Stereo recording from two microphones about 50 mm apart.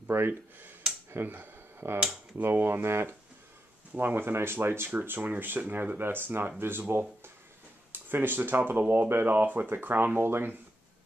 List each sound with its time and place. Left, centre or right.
0.1 s speech: right
1.1 s a sound: right
2.3 s speech: right
3.9 s speech: right
4.9 s speech: right